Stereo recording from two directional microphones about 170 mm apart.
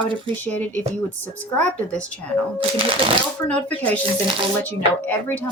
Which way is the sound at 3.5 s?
10° left (ahead or behind).